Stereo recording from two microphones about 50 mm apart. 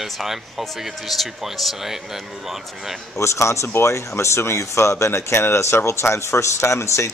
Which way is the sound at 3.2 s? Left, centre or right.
Left.